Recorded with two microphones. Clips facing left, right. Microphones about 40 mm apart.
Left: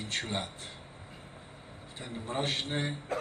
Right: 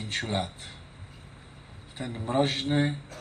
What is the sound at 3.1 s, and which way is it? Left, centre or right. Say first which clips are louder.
Music: left 11 dB; left.